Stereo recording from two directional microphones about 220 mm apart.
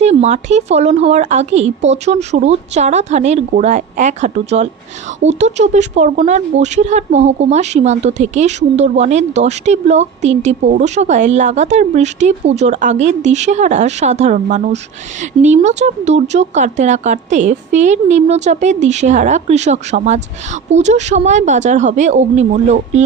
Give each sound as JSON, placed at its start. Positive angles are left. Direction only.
{"t": 0.0, "sound": "speech", "side_deg": -30}